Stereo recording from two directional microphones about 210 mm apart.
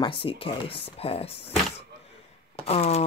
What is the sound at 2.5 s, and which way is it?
Speech, 30° left (ahead or behind).